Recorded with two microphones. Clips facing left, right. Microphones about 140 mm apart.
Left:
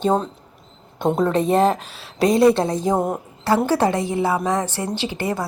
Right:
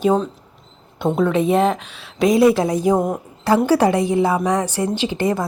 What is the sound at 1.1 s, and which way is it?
A woman's voice, centre (ahead or behind).